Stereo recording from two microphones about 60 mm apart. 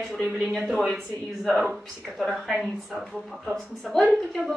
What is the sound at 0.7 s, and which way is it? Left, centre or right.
A woman's voice, centre.